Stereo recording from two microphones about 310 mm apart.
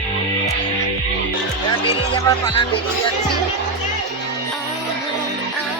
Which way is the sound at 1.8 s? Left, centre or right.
Centre.